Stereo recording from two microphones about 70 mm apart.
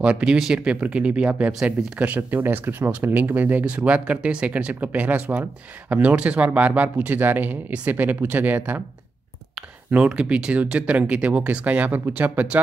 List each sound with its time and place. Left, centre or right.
0.0 s speech: centre
9.8 s speech: right